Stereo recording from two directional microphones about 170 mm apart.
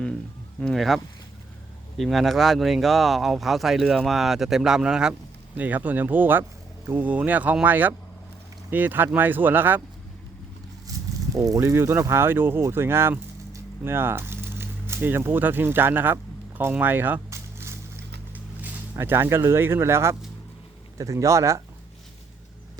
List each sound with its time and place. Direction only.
0.6 s speech: centre (ahead or behind)
11.3 s speech: 20° right (ahead or behind)
16.6 s a sound: 10° right (ahead or behind)
18.6 s speech: 15° right (ahead or behind)